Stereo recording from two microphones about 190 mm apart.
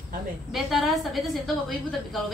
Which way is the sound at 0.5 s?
Centre (ahead or behind).